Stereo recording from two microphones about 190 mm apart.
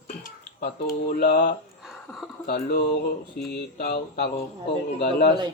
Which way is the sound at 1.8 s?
Centre (ahead or behind).